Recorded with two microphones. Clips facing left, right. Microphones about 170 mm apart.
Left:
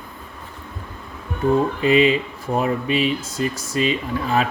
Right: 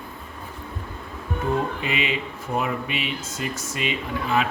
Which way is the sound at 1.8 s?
35° left (ahead or behind).